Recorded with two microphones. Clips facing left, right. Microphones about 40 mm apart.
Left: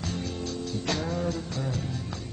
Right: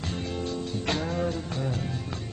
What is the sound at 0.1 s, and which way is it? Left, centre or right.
Music, right.